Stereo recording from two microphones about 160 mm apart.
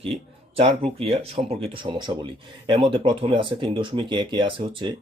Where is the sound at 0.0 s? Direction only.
35° right (ahead or behind).